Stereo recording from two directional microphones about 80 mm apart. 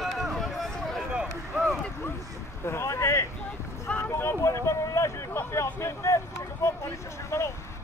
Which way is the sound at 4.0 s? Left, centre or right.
Left.